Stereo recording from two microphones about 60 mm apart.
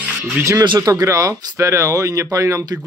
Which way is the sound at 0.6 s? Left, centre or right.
Right.